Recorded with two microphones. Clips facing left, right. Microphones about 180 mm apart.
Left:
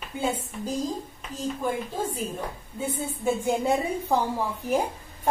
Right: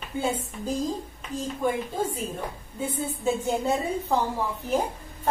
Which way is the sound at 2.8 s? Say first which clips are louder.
Even; 10° left (ahead or behind).